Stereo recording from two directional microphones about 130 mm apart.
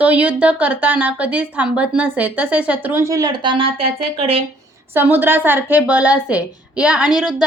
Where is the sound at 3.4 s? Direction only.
40° right (ahead or behind).